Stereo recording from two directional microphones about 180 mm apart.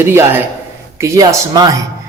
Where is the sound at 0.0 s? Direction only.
15° right (ahead or behind).